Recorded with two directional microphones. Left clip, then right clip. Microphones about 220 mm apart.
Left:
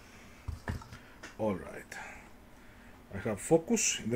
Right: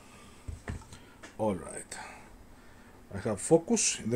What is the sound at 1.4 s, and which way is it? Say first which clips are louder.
Speech: right 2 dB; 15° right (ahead or behind).